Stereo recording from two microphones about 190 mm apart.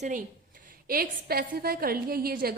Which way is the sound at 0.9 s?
50° right (ahead or behind).